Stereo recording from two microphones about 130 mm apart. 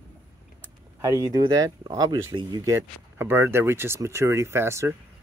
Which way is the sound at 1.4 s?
25° right (ahead or behind).